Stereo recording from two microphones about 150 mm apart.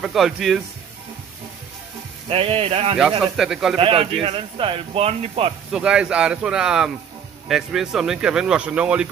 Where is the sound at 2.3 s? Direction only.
40° right (ahead or behind).